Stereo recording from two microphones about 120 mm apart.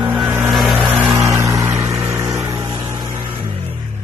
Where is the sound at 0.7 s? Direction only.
15° right (ahead or behind); by 3.5 s 35° right (ahead or behind).